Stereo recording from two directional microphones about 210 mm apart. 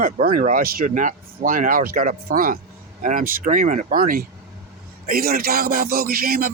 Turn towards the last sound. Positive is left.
turn(degrees=-45)  # may be behind; listen again after turning